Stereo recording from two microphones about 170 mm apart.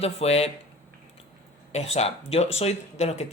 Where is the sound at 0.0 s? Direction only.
35° left (ahead or behind).